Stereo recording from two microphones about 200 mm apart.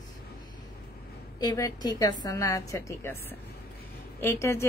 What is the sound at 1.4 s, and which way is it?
A woman's voice, 20° left (ahead or behind).